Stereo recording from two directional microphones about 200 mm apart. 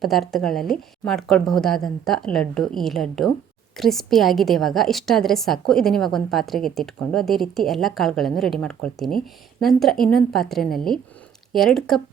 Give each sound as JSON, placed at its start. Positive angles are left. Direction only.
{"t": 0.0, "sound": "a woman's voice", "side_deg": 0}